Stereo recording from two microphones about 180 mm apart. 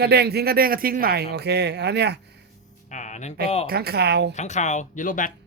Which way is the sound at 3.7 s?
60° right (ahead or behind).